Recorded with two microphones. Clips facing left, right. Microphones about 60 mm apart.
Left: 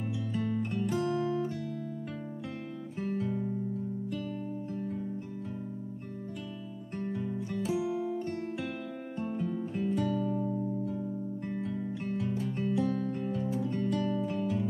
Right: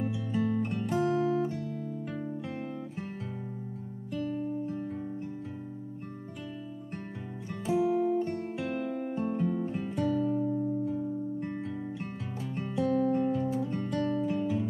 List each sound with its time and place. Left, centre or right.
0.0 s music: centre
1.0 s music: centre
3.0 s music: centre
7.7 s music: centre
12.7 s music: centre